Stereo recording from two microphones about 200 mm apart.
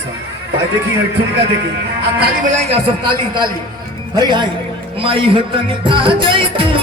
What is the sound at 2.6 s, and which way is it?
Music, 25° right (ahead or behind).